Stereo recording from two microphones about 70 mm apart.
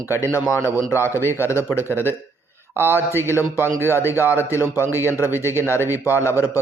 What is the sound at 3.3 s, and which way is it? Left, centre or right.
Speech, left.